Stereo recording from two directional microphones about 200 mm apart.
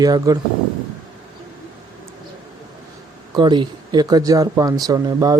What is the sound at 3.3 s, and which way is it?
Speech, 20° right (ahead or behind).